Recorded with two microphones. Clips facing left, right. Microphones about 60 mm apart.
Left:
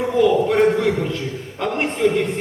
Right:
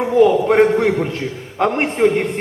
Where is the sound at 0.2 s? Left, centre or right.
Right.